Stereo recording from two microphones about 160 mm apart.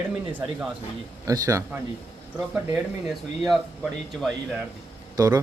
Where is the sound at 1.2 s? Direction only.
20° right (ahead or behind).